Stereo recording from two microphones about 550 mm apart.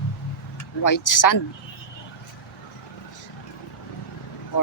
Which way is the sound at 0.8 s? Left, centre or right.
Left.